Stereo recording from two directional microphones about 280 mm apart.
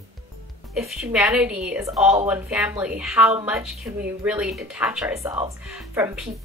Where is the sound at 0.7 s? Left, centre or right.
Centre.